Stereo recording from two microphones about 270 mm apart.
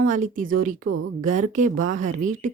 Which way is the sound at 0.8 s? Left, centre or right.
Right.